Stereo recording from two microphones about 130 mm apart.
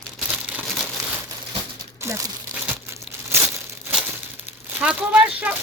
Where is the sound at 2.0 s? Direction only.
20° right (ahead or behind).